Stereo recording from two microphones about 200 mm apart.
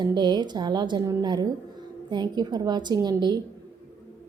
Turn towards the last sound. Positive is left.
turn(degrees=-20)  # may be behind; listen again after turning